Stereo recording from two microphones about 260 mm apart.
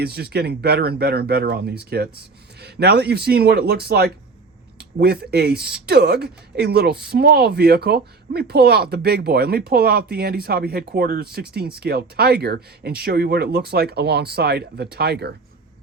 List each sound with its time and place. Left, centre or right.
0.0 s speech: right